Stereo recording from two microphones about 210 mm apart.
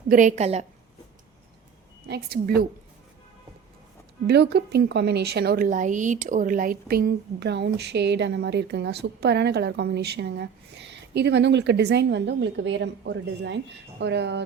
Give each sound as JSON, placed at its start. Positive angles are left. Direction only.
{"t": 0.1, "sound": "a woman's voice", "side_deg": -35}
{"t": 2.0, "sound": "a woman's voice", "side_deg": -50}
{"t": 4.3, "sound": "a woman's voice", "side_deg": -50}